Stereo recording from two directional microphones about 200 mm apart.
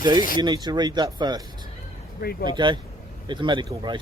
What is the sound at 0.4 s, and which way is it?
Speech, 20° right (ahead or behind).